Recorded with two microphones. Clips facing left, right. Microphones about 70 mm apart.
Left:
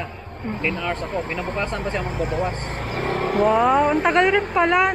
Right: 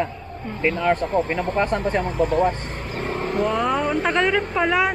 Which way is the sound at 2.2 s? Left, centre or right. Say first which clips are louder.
Right 7 dB; centre.